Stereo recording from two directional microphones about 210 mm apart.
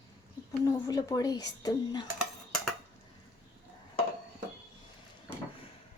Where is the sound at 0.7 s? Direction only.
15° left (ahead or behind).